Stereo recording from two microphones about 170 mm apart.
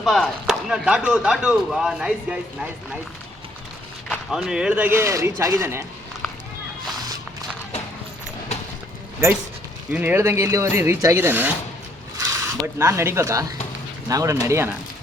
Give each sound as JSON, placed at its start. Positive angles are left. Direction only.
{"t": 0.0, "sound": "speech", "side_deg": 0}
{"t": 4.1, "sound": "speech", "side_deg": -5}
{"t": 9.2, "sound": "speech", "side_deg": -15}